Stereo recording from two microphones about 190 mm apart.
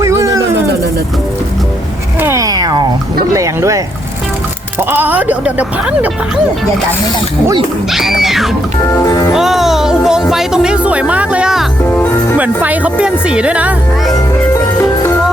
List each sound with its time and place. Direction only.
0.0 s a sound: 15° right (ahead or behind)
2.2 s a sound: 15° right (ahead or behind)
3.3 s speech: 15° right (ahead or behind)
7.9 s speech: centre (ahead or behind)
8.9 s music: 20° left (ahead or behind)
9.3 s speech: centre (ahead or behind)